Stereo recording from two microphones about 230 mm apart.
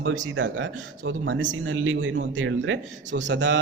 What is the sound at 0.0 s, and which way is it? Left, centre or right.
Speech, right.